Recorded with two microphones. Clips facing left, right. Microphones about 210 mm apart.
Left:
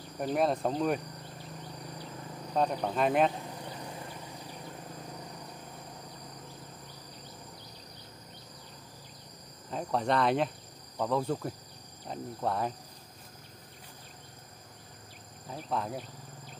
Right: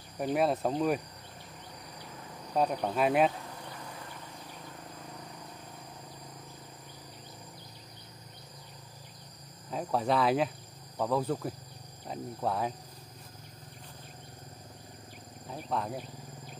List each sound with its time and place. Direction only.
0.2 s speech: 5° right (ahead or behind)
2.5 s speech: 5° right (ahead or behind)
3.4 s insect: 15° left (ahead or behind)
9.7 s speech: 5° right (ahead or behind)
15.4 s speech: centre (ahead or behind)